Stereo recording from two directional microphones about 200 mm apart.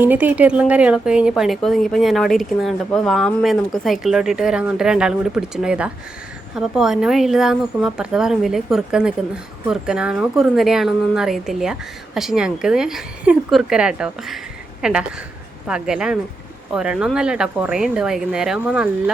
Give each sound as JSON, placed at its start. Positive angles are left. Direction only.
{"t": 0.0, "sound": "speech", "side_deg": -10}